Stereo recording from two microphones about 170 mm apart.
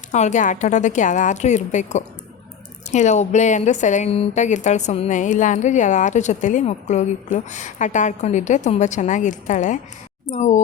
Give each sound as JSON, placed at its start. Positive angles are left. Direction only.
{"t": 0.1, "sound": "speech", "side_deg": 45}